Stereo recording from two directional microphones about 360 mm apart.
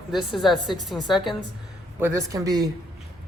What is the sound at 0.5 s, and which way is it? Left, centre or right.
Speech, centre.